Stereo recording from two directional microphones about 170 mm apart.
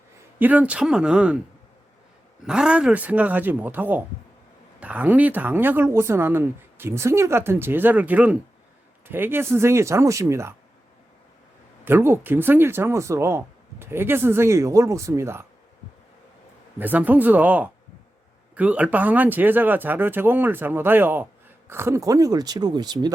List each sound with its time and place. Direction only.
0.3 s speech: 10° right (ahead or behind)
2.5 s speech: 5° right (ahead or behind)
11.9 s speech: 15° right (ahead or behind)
16.7 s speech: 10° right (ahead or behind)